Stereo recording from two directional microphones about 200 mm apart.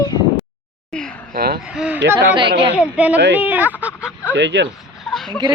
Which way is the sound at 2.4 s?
25° right (ahead or behind).